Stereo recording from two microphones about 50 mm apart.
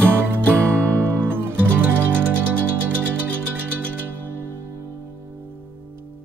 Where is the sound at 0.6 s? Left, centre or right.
Right.